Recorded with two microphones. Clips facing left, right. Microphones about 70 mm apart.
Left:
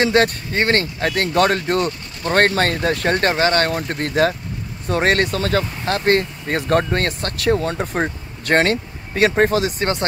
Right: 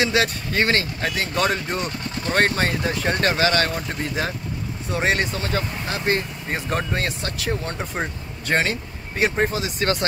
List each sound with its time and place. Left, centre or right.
0.0 s speech: left
3.2 s speech: left
3.7 s speech: left
5.4 s speech: left
5.9 s speech: left
6.9 s speech: left
8.5 s speech: left
9.8 s speech: left